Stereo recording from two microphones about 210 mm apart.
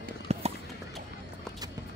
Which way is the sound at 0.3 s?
30° right (ahead or behind).